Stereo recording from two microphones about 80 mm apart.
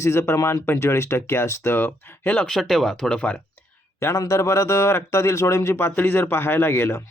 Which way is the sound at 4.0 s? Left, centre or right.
Left.